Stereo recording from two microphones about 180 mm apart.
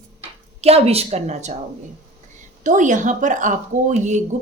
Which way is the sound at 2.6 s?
45° right (ahead or behind).